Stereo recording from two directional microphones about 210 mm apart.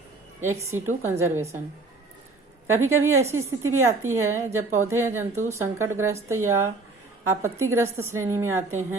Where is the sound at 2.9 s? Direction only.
80° right.